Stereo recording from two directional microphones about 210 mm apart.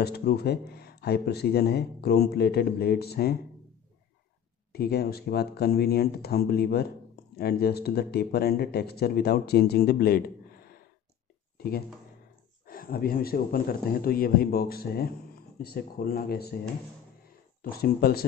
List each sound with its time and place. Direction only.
0.0 s a man's voice: 50° left (ahead or behind)
4.7 s a man's voice: 45° left (ahead or behind)
11.5 s a sound: 45° left (ahead or behind)
12.6 s a man's voice: 45° left (ahead or behind)